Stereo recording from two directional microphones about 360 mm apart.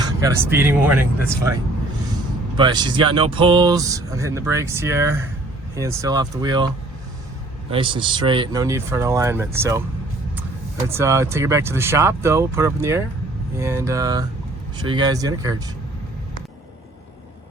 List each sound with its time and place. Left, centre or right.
0.0 s speech: centre
2.6 s speech: centre
7.7 s speech: centre